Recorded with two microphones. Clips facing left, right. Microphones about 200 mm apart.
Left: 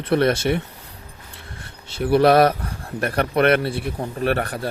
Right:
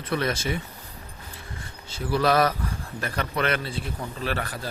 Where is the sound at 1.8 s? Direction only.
65° left (ahead or behind).